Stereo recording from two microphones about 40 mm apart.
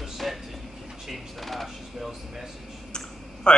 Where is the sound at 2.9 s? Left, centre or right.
Left.